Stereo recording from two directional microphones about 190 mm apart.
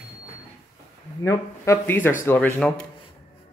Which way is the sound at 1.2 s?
15° left (ahead or behind).